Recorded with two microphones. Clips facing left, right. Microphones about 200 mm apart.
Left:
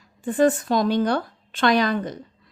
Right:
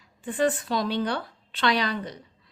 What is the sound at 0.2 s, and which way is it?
A woman's voice, 45° left (ahead or behind).